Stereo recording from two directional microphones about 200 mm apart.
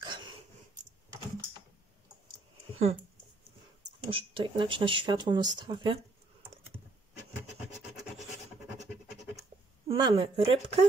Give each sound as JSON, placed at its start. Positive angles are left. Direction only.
{"t": 0.0, "sound": "a sound", "side_deg": -25}
{"t": 2.7, "sound": "speech", "side_deg": -30}
{"t": 4.1, "sound": "speech", "side_deg": -25}
{"t": 9.8, "sound": "speech", "side_deg": -25}